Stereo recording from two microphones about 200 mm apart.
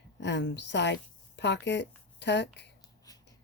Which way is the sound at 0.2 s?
60° left (ahead or behind).